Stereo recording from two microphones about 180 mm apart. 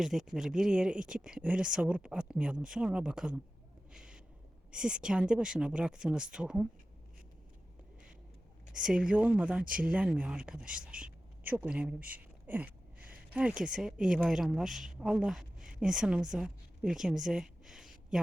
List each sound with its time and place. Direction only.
0.0 s speech: centre (ahead or behind)
3.9 s a sound: 5° right (ahead or behind)
4.7 s speech: 5° right (ahead or behind)
8.8 s speech: 5° right (ahead or behind)
9.6 s speech: 50° right (ahead or behind)
9.9 s a woman's voice: 10° right (ahead or behind)